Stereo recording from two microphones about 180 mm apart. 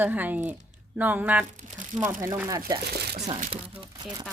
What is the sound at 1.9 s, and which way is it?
Speech, 35° right (ahead or behind).